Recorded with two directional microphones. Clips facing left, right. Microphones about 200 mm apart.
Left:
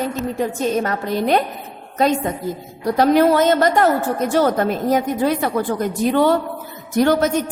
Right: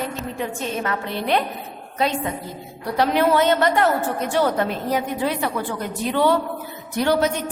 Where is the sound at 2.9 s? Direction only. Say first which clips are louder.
Left 4 dB; 45° left (ahead or behind).